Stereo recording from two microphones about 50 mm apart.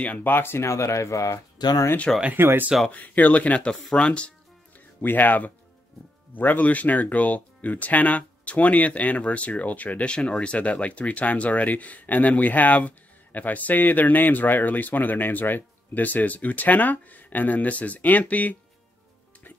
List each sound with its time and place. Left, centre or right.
0.2 s speech: left
0.7 s speech: left
2.3 s speech: right
2.9 s speech: left
5.0 s speech: left